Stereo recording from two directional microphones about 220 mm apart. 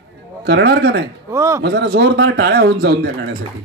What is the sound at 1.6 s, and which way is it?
Speech, 45° right (ahead or behind).